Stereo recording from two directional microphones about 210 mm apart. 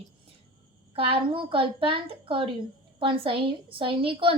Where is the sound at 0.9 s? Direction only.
25° right (ahead or behind).